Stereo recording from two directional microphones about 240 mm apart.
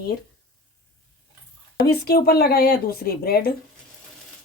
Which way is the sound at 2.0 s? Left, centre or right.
Left.